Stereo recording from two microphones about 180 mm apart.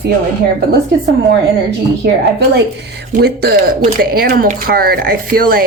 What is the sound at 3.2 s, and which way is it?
Speech, 60° right (ahead or behind).